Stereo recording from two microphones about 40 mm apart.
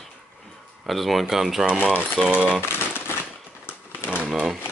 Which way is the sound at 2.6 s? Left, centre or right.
Left.